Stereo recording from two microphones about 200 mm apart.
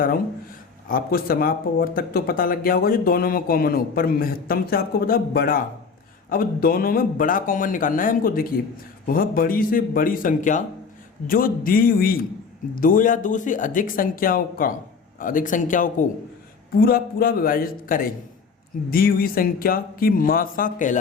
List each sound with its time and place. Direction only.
0.9 s speech: 45° left (ahead or behind)